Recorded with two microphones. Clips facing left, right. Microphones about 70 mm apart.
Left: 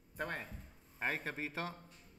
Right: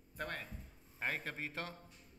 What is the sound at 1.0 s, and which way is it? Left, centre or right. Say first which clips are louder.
Speech: left 2 dB; centre.